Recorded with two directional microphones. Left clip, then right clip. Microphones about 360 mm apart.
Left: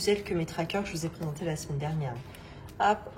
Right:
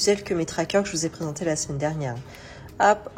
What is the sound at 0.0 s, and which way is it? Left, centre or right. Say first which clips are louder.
Speech: right 6 dB; centre.